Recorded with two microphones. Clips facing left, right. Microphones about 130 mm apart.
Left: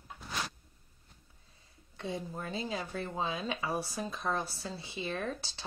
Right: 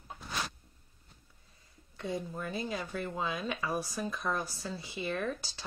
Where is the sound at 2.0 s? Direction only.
30° left (ahead or behind).